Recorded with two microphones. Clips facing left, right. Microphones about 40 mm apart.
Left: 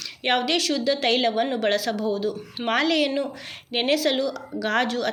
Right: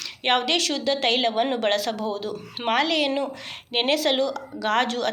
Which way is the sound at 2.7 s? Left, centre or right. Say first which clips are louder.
Even; centre.